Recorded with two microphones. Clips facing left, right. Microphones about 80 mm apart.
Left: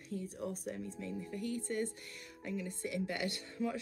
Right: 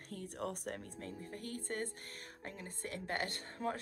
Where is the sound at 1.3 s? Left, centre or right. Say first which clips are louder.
Left 5 dB; right.